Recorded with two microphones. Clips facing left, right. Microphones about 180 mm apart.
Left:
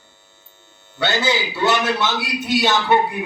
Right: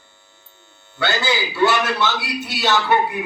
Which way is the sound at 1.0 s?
20° left (ahead or behind).